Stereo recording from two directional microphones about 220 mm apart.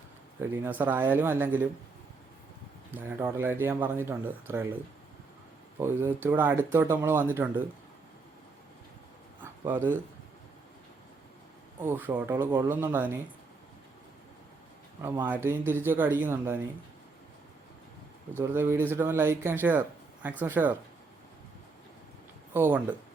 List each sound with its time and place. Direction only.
0.5 s speech: 10° right (ahead or behind)
2.9 s speech: 10° right (ahead or behind)
5.8 s speech: 10° right (ahead or behind)
9.4 s a sound: 10° right (ahead or behind)
11.8 s speech: 10° right (ahead or behind)
15.0 s speech: 20° right (ahead or behind)
18.3 s speech: 10° right (ahead or behind)
22.5 s speech: 10° right (ahead or behind)